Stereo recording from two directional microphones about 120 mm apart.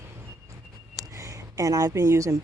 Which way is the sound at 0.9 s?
25° right (ahead or behind).